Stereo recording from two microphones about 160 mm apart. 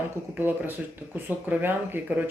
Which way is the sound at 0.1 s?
10° right (ahead or behind).